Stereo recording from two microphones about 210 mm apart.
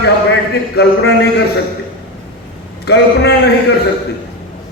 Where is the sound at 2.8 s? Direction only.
50° left (ahead or behind).